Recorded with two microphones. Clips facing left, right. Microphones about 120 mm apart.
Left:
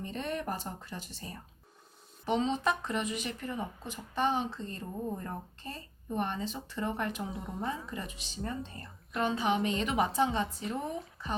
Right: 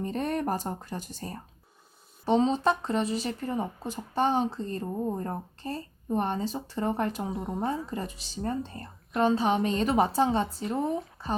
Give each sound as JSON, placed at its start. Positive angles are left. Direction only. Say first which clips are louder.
{"t": 0.0, "sound": "speech", "louder": "right 7 dB", "side_deg": -45}
{"t": 7.3, "sound": "a woman's voice", "louder": "right 7 dB", "side_deg": 0}
{"t": 7.9, "sound": "speech", "louder": "right 6 dB", "side_deg": -40}